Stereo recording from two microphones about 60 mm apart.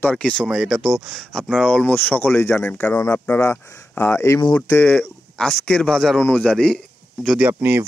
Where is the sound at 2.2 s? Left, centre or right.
Left.